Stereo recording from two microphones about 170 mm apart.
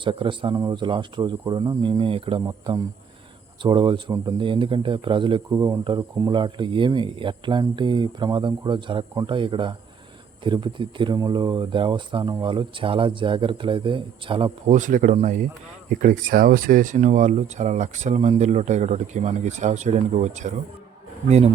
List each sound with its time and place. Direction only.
0.0 s speech: 30° right (ahead or behind)
14.7 s speech: 50° right (ahead or behind)